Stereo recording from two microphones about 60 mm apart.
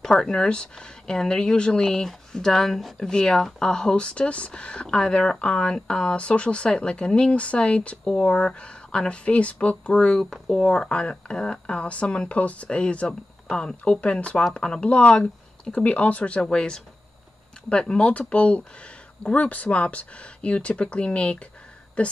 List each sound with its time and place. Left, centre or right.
0.0 s a woman's voice: centre